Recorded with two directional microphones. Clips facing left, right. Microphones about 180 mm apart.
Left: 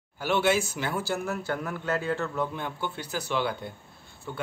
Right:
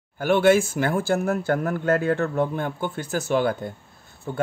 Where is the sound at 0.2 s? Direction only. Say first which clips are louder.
Right 7 dB; 50° right (ahead or behind).